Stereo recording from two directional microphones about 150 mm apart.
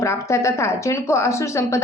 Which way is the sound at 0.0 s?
20° left (ahead or behind).